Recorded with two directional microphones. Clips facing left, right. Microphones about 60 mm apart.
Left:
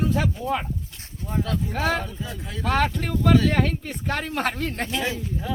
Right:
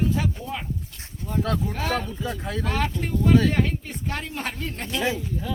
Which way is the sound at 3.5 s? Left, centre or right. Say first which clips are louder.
Left 1 dB; left.